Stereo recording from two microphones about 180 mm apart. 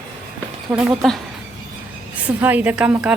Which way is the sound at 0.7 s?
Centre (ahead or behind).